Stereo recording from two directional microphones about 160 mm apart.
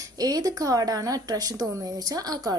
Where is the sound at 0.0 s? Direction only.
25° right (ahead or behind).